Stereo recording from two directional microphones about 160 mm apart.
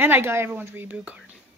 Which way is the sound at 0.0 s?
15° right (ahead or behind).